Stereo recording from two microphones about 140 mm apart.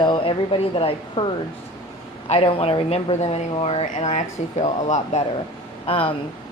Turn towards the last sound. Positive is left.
turn(degrees=40)  # may be behind; listen again after turning